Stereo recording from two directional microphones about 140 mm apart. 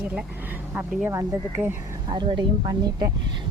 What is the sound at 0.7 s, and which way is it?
Speech, 15° right (ahead or behind).